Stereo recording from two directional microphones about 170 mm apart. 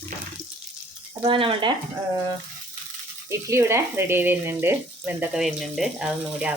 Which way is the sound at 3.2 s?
15° right (ahead or behind).